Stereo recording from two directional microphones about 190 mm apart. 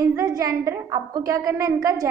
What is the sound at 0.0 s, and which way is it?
A woman's voice, 15° right (ahead or behind).